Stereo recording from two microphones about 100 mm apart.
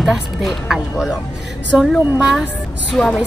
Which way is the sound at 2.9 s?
10° left (ahead or behind).